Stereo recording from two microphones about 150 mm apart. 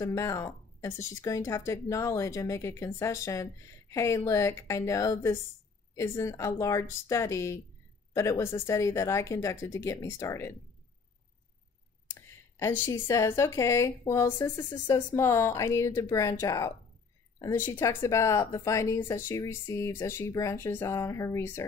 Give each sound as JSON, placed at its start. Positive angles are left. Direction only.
{"t": 0.0, "sound": "speech", "side_deg": 20}
{"t": 12.1, "sound": "speech", "side_deg": 15}